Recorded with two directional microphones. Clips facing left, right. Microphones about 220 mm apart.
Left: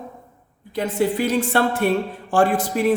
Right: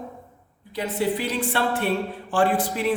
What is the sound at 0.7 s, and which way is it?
A woman's voice, 45° left (ahead or behind).